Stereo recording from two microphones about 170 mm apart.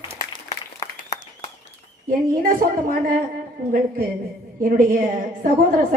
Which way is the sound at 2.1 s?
55° right (ahead or behind).